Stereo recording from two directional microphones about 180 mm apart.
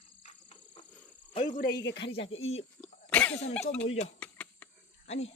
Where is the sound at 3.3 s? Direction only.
35° left (ahead or behind).